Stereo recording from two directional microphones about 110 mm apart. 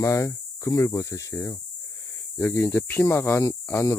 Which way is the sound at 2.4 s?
20° left (ahead or behind).